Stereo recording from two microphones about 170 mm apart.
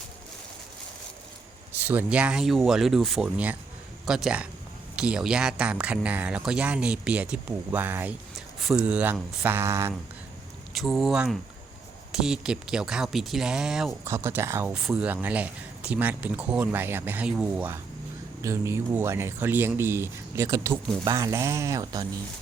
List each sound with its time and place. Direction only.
1.9 s speech: 10° right (ahead or behind)
10.8 s speech: centre (ahead or behind)
14.0 s speech: 15° right (ahead or behind)
14.7 s speech: 5° right (ahead or behind); by 22.0 s 20° right (ahead or behind)